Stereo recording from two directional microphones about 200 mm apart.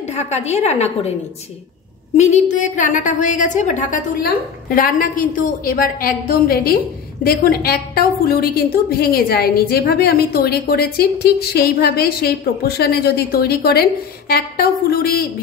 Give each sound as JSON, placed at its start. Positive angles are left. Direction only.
{"t": 0.0, "sound": "a woman's voice", "side_deg": 35}
{"t": 2.1, "sound": "a woman's voice", "side_deg": 35}